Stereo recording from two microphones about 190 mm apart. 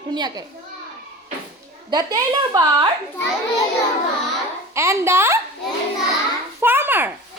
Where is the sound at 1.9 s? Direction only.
20° right (ahead or behind).